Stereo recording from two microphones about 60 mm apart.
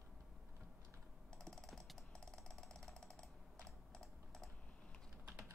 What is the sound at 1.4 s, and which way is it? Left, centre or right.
Ratchet, centre.